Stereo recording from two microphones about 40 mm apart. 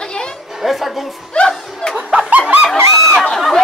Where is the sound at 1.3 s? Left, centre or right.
Left.